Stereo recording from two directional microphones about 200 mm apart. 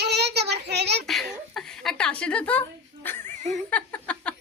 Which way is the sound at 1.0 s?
Centre (ahead or behind).